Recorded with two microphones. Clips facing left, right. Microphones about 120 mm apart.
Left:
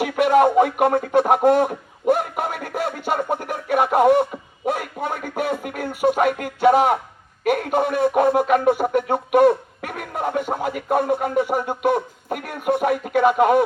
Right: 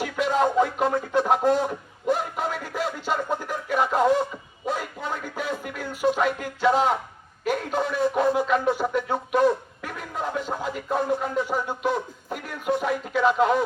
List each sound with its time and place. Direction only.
0.0 s a sound: 60° left (ahead or behind)
5.4 s music: 55° left (ahead or behind)
7.4 s speech: 60° left (ahead or behind)